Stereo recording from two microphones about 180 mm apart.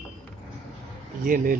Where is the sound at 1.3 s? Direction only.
50° right (ahead or behind).